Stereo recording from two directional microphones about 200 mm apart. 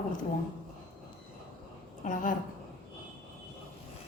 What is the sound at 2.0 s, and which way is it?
Speech, 40° left (ahead or behind).